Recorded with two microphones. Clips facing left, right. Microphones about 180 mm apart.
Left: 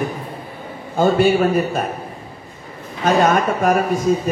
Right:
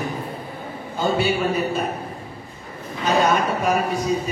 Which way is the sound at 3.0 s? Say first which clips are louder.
Left 4 dB; 50° left (ahead or behind).